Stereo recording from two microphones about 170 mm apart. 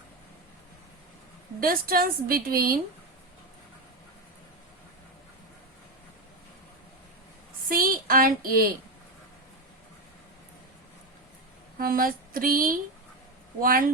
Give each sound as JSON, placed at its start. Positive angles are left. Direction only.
{"t": 1.6, "sound": "a woman's voice", "side_deg": -60}
{"t": 7.7, "sound": "a sound", "side_deg": -60}
{"t": 11.8, "sound": "a woman's voice", "side_deg": -55}